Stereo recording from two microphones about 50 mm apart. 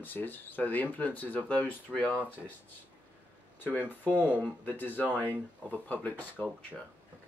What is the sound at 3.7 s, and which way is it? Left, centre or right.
Speech, left.